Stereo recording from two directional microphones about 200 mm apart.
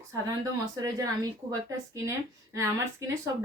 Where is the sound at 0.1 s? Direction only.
15° right (ahead or behind).